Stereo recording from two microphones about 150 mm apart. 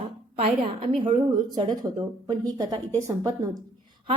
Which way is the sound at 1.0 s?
35° right (ahead or behind).